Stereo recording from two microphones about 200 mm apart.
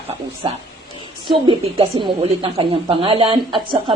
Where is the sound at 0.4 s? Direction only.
25° right (ahead or behind).